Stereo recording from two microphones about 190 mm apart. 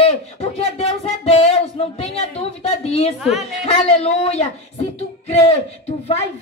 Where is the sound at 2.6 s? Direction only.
30° left (ahead or behind).